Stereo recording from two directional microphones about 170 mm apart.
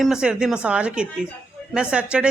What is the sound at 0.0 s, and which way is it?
Speech, 5° right (ahead or behind).